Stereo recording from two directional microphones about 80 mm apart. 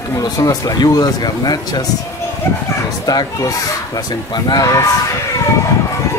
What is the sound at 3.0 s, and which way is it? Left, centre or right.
Speech, left.